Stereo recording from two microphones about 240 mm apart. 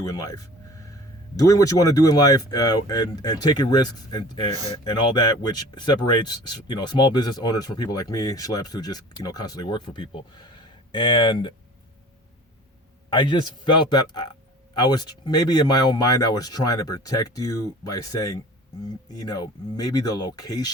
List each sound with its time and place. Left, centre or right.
0.0 s a sound: centre
1.4 s speech: centre
13.1 s speech: centre